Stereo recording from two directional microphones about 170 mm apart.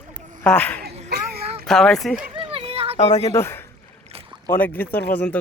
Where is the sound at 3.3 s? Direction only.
15° left (ahead or behind).